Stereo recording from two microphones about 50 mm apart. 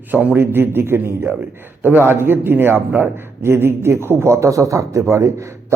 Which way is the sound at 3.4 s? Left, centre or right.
Right.